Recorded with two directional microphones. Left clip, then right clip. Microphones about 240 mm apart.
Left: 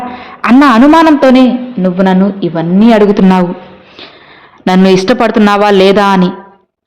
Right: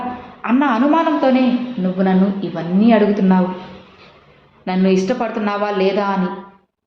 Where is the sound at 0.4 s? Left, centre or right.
Left.